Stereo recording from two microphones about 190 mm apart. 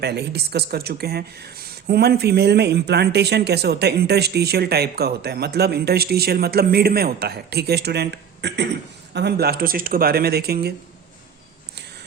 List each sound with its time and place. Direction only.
0.0 s speech: 60° right (ahead or behind)